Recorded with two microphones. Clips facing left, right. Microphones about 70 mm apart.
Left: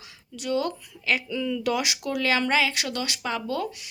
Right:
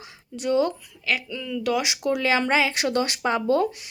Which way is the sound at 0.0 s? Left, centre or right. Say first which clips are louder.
Right 6 dB; right.